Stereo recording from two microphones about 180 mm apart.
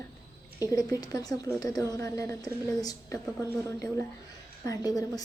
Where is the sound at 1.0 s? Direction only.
20° left (ahead or behind).